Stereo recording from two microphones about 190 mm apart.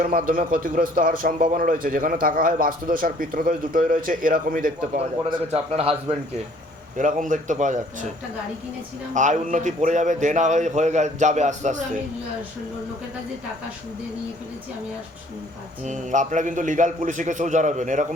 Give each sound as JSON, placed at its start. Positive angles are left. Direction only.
{"t": 0.0, "sound": "a man's voice", "side_deg": -45}
{"t": 4.9, "sound": "a man's voice", "side_deg": -30}
{"t": 6.9, "sound": "a man's voice", "side_deg": -40}
{"t": 9.1, "sound": "a man's voice", "side_deg": -40}
{"t": 15.8, "sound": "a man's voice", "side_deg": -40}